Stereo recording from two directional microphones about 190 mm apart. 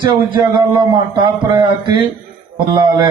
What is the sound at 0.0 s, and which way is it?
A man's voice, 25° right (ahead or behind).